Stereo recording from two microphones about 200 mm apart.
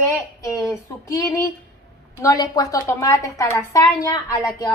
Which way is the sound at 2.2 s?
15° left (ahead or behind).